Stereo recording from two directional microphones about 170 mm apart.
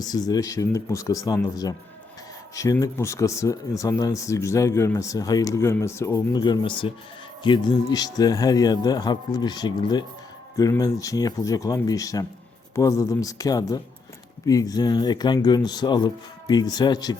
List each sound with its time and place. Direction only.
0.0 s speech: 20° left (ahead or behind)